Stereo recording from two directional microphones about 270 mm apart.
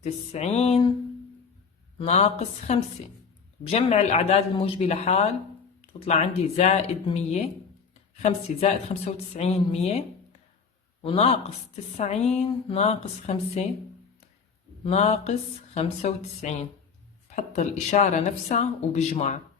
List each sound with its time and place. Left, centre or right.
0.0 s speech: left
2.0 s speech: left
11.0 s speech: left
14.8 s speech: left